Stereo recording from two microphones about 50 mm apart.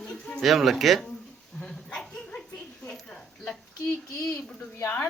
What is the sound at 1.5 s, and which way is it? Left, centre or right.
Dog, centre.